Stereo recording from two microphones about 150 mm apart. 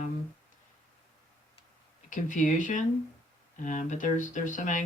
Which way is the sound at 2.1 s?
60° left (ahead or behind).